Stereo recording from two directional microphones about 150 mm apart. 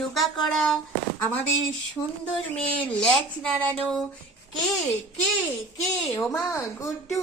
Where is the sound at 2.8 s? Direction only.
10° left (ahead or behind).